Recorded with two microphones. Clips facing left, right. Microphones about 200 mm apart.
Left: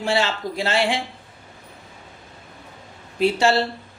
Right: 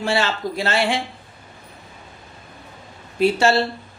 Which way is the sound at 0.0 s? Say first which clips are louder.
Right 1 dB; 15° left (ahead or behind).